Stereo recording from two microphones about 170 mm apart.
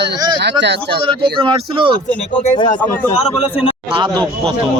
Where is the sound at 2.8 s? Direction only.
10° left (ahead or behind).